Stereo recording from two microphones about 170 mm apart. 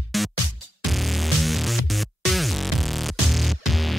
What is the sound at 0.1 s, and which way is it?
Music, centre (ahead or behind).